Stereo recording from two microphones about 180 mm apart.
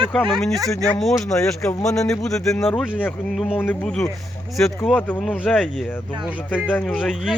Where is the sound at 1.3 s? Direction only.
15° left (ahead or behind).